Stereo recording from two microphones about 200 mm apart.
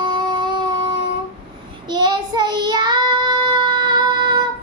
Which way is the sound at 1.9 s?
20° right (ahead or behind).